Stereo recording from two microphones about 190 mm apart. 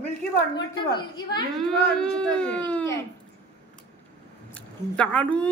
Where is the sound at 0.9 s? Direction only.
25° left (ahead or behind).